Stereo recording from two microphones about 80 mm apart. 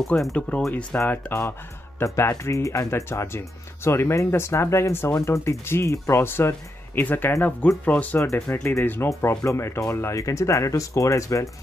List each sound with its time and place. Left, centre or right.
0.0 s speech: centre
1.0 s speech: left
8.2 s speech: left